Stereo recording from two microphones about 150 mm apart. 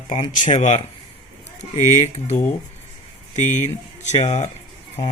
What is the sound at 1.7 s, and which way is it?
Speech, 50° left (ahead or behind).